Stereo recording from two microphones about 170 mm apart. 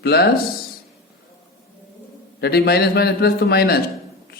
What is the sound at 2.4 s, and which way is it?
A man's voice, 70° left (ahead or behind).